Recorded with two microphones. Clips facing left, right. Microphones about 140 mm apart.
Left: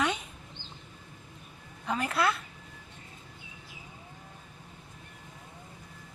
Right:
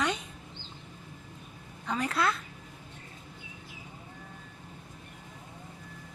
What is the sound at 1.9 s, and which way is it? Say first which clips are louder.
Speech: left 1 dB; centre (ahead or behind).